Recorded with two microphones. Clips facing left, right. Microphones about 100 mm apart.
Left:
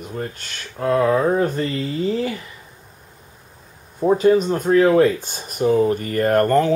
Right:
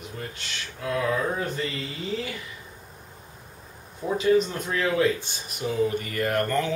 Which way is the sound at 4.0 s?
45° left (ahead or behind).